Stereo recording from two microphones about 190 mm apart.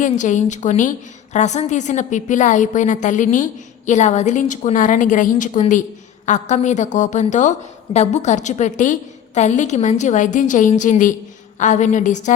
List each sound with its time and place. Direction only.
0.0 s a woman's voice: 40° left (ahead or behind)